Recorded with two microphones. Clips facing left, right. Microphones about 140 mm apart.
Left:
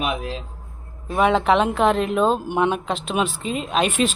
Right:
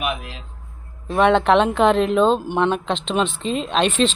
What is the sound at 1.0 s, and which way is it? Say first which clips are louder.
Speech: right 2 dB; 5° left (ahead or behind).